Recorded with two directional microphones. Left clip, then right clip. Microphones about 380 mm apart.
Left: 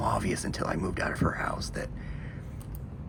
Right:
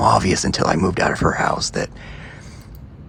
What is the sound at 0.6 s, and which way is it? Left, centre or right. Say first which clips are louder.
Speech: right 14 dB; right.